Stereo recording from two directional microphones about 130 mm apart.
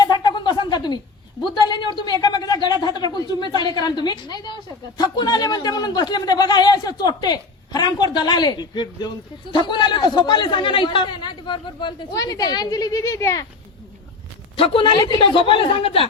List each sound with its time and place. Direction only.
0.0 s a sound: 30° left (ahead or behind)
4.9 s a man's voice: 30° left (ahead or behind)
14.5 s a man's voice: 45° left (ahead or behind)